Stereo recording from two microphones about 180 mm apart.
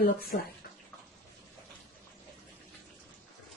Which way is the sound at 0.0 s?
55° left (ahead or behind).